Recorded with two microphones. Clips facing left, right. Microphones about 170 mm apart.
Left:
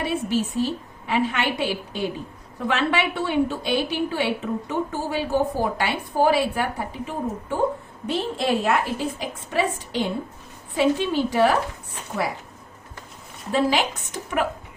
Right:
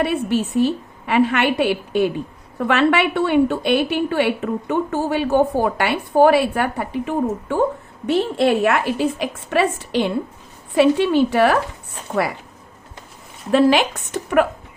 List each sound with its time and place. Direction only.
0.0 s a woman's voice: 65° right (ahead or behind)
13.5 s a woman's voice: 70° right (ahead or behind)